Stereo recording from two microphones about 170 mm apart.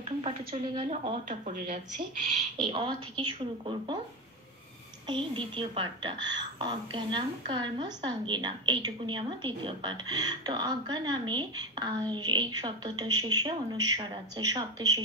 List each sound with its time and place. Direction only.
0.2 s a woman's voice: 30° right (ahead or behind)
0.9 s speech: 45° right (ahead or behind)
2.5 s a woman's voice: 30° right (ahead or behind)
5.0 s a woman's voice: 30° right (ahead or behind)